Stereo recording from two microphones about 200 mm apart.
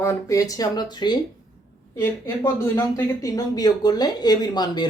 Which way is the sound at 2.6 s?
15° left (ahead or behind).